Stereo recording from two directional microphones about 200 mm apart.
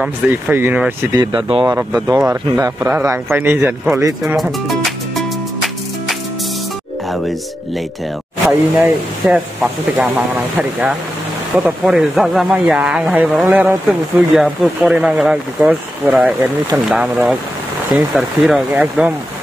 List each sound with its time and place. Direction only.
0.0 s a man's voice: 10° right (ahead or behind)
1.2 s a man's voice: 25° right (ahead or behind); by 5.2 s centre (ahead or behind)
9.2 s speech: 5° right (ahead or behind)